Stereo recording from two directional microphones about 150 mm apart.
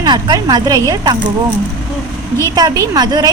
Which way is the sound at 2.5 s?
25° right (ahead or behind).